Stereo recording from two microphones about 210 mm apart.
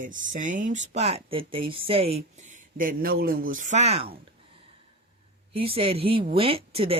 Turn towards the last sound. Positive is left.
turn(degrees=-25)  # may be behind; listen again after turning